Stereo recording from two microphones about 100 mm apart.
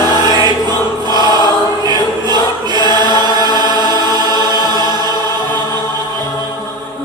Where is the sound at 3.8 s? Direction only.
40° left (ahead or behind).